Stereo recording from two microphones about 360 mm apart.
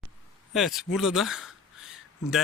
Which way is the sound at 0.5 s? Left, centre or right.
Centre.